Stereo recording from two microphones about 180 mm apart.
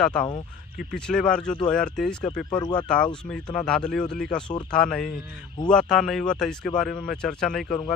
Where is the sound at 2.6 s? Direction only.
25° left (ahead or behind).